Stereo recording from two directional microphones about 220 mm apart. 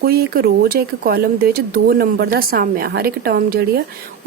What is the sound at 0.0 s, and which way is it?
Speech, 45° right (ahead or behind).